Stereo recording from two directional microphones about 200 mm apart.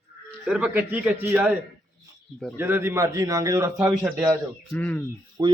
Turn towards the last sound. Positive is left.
turn(degrees=-20)  # may be behind; listen again after turning